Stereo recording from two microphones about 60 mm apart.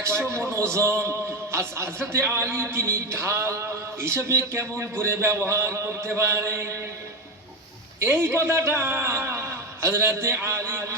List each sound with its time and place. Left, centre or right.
0.3 s a man's voice: right
8.0 s a man's voice: right